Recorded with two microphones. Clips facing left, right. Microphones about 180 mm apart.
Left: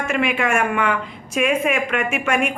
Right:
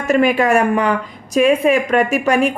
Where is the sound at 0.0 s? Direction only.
40° right (ahead or behind).